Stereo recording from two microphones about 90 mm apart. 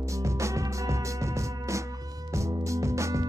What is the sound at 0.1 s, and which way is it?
Music, 35° right (ahead or behind).